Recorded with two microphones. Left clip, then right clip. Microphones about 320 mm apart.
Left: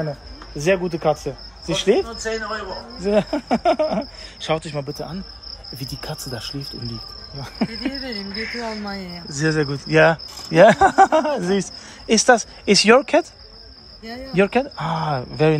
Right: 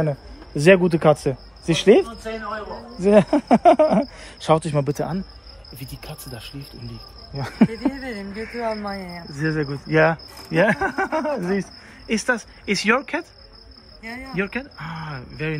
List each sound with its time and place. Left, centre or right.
0.7 s speech: right
1.2 s cricket: right
3.0 s speech: right
5.8 s speech: centre
7.3 s speech: right
9.3 s cricket: centre
14.0 s speech: centre